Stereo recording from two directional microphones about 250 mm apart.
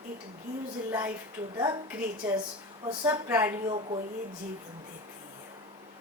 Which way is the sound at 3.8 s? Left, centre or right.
Right.